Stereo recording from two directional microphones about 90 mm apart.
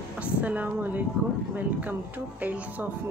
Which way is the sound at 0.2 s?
15° right (ahead or behind).